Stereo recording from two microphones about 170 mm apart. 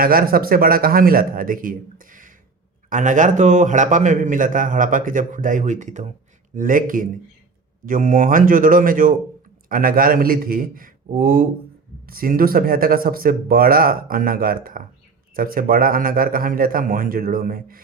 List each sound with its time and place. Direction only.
0.0 s a man's voice: 60° right (ahead or behind)